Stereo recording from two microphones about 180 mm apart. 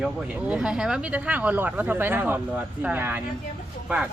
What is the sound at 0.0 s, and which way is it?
Speech, 5° right (ahead or behind).